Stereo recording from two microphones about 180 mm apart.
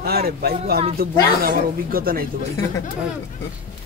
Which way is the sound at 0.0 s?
60° right (ahead or behind).